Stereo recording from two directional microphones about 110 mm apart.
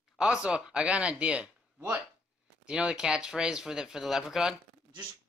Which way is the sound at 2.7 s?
10° right (ahead or behind).